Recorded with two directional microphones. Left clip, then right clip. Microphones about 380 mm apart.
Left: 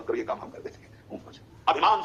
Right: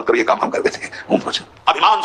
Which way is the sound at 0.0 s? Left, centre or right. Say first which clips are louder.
Right 15 dB; right.